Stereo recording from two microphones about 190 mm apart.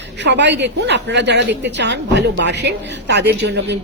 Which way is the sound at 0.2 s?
65° right (ahead or behind).